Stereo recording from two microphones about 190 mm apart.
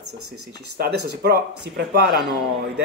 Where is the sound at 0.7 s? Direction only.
60° right (ahead or behind).